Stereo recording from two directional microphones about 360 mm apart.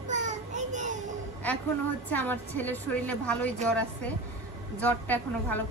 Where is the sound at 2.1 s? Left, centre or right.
Centre.